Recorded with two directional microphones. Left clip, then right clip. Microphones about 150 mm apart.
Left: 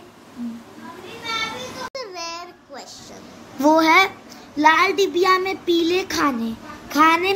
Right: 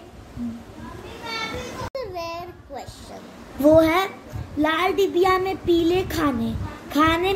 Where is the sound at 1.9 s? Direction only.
5° left (ahead or behind).